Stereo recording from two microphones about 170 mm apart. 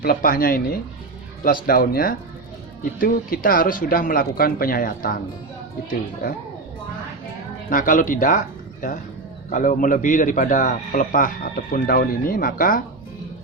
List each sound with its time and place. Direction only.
0.0 s speech: 60° left (ahead or behind)
1.6 s speech: 60° left (ahead or behind)
7.7 s a man's voice: 50° left (ahead or behind)